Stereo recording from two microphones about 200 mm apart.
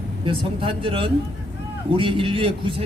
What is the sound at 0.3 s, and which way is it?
A man's voice, 25° right (ahead or behind).